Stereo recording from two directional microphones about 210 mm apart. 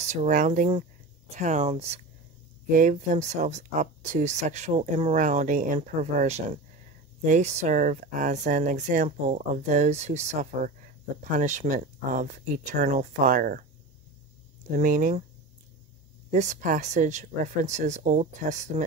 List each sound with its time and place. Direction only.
0.0 s speech: 35° right (ahead or behind)
14.7 s speech: 40° right (ahead or behind)
16.3 s speech: 35° right (ahead or behind)